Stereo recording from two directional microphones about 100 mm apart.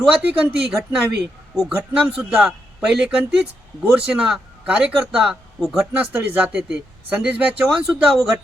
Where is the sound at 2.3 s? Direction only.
5° right (ahead or behind).